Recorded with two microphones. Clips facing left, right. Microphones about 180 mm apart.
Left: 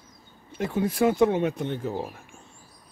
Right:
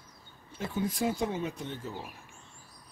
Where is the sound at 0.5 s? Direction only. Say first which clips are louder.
Left 7 dB; 65° left (ahead or behind).